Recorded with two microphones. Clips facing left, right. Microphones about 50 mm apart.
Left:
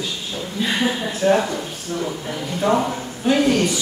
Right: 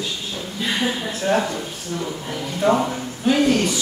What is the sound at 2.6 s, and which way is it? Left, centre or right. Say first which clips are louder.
Speech: right 1 dB; centre.